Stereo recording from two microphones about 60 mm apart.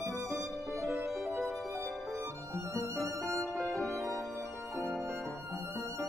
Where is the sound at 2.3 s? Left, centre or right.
Right.